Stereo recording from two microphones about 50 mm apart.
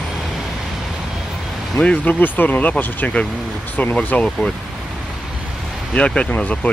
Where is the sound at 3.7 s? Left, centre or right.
Left.